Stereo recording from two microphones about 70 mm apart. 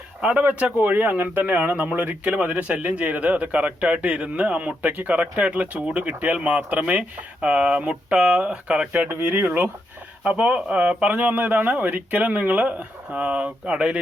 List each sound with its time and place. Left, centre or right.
0.2 s speech: centre
9.0 s speech: right
10.2 s speech: centre